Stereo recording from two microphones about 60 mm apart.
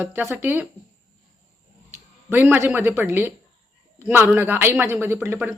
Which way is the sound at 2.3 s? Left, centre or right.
Right.